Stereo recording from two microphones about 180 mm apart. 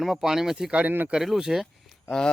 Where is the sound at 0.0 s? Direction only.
Centre (ahead or behind).